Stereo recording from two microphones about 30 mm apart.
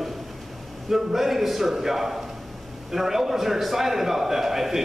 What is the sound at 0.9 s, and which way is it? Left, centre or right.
A man's voice, centre.